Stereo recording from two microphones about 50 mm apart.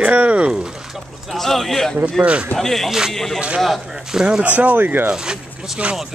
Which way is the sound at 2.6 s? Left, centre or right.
Centre.